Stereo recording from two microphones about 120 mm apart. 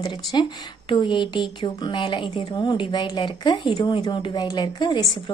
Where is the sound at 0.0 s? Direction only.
40° left (ahead or behind).